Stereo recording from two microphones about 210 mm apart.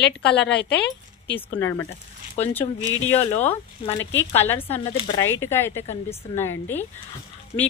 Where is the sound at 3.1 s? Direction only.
30° left (ahead or behind).